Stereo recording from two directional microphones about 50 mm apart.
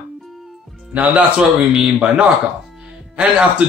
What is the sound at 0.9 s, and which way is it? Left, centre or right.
Music, right.